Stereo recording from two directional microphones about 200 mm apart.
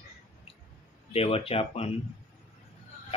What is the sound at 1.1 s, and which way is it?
Speech, 30° left (ahead or behind).